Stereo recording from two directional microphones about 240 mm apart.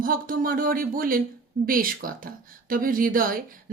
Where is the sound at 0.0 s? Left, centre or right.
Right.